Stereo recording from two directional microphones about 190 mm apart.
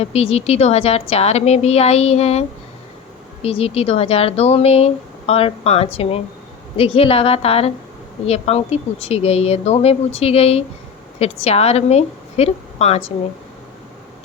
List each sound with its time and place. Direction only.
0.0 s speech: 30° left (ahead or behind)
3.4 s speech: 30° left (ahead or behind)